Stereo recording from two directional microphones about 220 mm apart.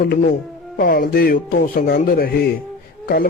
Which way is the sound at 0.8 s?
45° left (ahead or behind).